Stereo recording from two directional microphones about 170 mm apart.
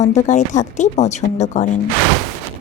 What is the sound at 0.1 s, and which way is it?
A woman's voice, 45° left (ahead or behind).